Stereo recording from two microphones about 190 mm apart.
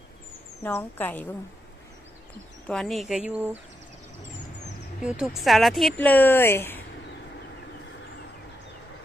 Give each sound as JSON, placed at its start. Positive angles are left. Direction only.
{"t": 0.6, "sound": "a woman's voice", "side_deg": 10}
{"t": 2.6, "sound": "speech", "side_deg": 0}
{"t": 5.0, "sound": "a woman's voice", "side_deg": -5}